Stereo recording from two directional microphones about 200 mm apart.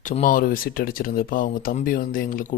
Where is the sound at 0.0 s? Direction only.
40° left (ahead or behind).